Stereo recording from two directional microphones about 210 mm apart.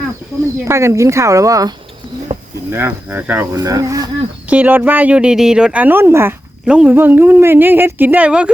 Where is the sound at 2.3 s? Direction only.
30° right (ahead or behind).